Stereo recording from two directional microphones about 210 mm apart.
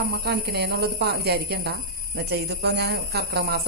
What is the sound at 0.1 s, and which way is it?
Speech, 50° right (ahead or behind).